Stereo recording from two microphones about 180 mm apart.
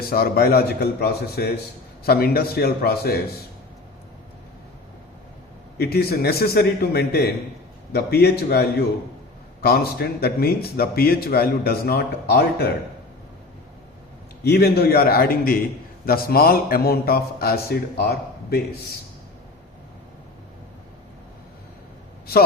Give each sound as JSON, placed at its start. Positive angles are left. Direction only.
{"t": 0.1, "sound": "speech", "side_deg": 55}
{"t": 5.7, "sound": "speech", "side_deg": 60}
{"t": 14.4, "sound": "speech", "side_deg": 65}